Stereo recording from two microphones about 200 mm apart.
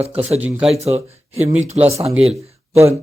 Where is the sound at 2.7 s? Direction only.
15° right (ahead or behind).